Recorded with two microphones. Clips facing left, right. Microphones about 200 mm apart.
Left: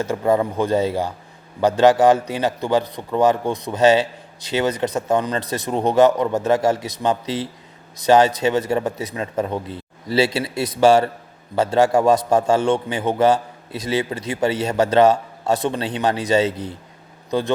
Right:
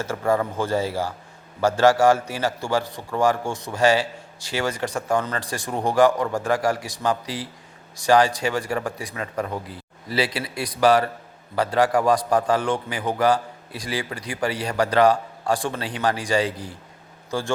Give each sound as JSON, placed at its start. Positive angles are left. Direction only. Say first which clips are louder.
{"t": 0.0, "sound": "a man's voice", "louder": "left 4 dB", "side_deg": 15}